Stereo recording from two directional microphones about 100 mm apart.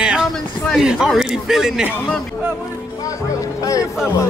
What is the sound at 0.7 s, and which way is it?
A man's voice, 5° right (ahead or behind).